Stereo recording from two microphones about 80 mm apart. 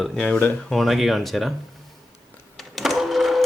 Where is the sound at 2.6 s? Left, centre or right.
Centre.